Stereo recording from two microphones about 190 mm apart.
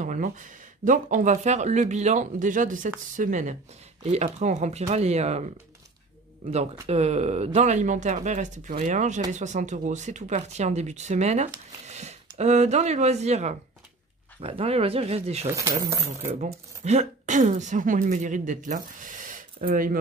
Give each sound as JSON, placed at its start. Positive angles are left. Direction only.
{"t": 0.0, "sound": "speech", "side_deg": -40}
{"t": 6.5, "sound": "speech", "side_deg": -35}
{"t": 15.5, "sound": "speech", "side_deg": -15}
{"t": 16.3, "sound": "speech", "side_deg": -40}